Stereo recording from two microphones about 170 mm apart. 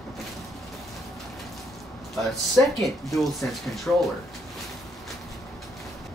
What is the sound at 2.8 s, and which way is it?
Speech, centre (ahead or behind).